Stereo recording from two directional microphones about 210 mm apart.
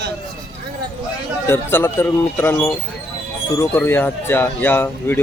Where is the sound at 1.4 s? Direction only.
10° left (ahead or behind).